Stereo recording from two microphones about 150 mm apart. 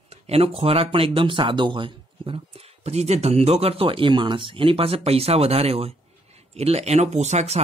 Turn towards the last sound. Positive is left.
turn(degrees=-50)  # may be behind; listen again after turning